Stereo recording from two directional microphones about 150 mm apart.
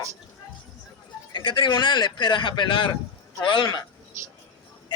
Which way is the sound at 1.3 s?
30° left (ahead or behind).